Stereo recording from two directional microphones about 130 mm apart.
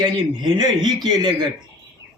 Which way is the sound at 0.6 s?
35° right (ahead or behind).